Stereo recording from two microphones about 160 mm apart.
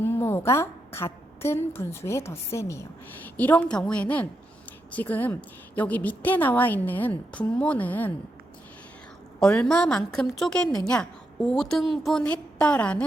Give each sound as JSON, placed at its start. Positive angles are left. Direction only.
{"t": 0.0, "sound": "a woman's voice", "side_deg": 15}
{"t": 9.4, "sound": "a woman's voice", "side_deg": 5}